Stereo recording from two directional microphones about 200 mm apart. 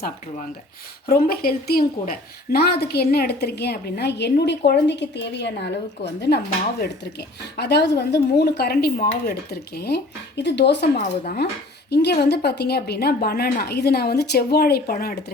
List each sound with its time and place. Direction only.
1.0 s a woman's voice: 50° left (ahead or behind)
10.9 s speech: 40° left (ahead or behind)
11.9 s a woman's voice: 55° left (ahead or behind)